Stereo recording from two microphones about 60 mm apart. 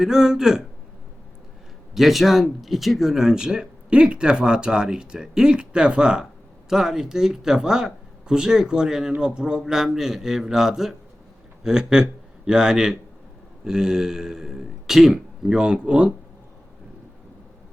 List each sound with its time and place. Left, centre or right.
0.0 s speech: centre
2.0 s speech: centre